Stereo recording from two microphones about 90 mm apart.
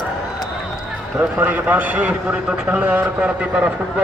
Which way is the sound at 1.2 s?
15° right (ahead or behind).